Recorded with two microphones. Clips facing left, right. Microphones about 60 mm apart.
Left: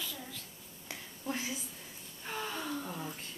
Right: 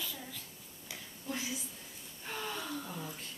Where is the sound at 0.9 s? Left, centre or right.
Left.